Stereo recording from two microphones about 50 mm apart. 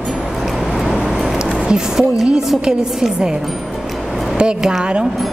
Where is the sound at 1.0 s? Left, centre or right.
Centre.